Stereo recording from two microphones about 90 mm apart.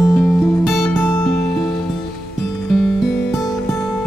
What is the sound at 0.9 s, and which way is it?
Music, 25° left (ahead or behind).